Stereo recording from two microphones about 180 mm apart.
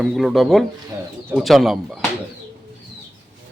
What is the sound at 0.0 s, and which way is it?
A man's voice, centre (ahead or behind).